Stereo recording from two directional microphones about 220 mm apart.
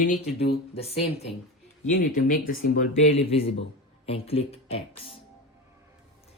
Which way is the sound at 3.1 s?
25° left (ahead or behind).